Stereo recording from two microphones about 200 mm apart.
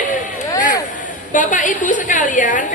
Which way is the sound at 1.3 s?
40° left (ahead or behind).